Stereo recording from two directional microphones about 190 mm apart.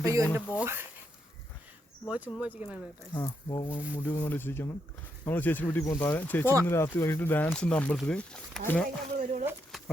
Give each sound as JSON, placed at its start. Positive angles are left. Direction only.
{"t": 0.0, "sound": "speech", "side_deg": -15}
{"t": 2.0, "sound": "speech", "side_deg": -5}
{"t": 3.2, "sound": "speech", "side_deg": 20}
{"t": 9.1, "sound": "speech", "side_deg": -40}
{"t": 9.7, "sound": "a sound", "side_deg": 0}